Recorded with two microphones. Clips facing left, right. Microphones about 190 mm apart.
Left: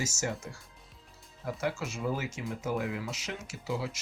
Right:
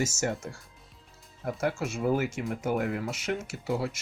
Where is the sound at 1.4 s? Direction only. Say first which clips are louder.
Right 4 dB; 55° right (ahead or behind).